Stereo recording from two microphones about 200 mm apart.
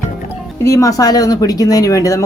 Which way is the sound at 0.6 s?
15° left (ahead or behind).